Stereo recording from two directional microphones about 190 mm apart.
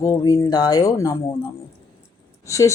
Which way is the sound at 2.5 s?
15° left (ahead or behind).